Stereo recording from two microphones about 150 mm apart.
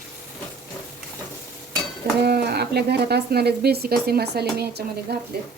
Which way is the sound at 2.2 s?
90° right.